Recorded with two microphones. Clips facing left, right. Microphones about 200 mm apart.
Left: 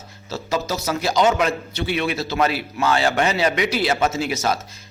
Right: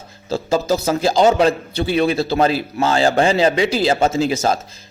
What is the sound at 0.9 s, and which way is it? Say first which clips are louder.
A man's voice: right 3 dB; 30° right (ahead or behind).